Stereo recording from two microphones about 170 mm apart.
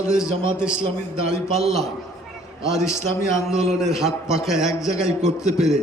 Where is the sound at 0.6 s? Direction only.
5° right (ahead or behind).